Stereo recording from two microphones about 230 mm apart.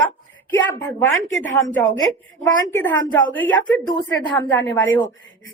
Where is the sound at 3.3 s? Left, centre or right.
Centre.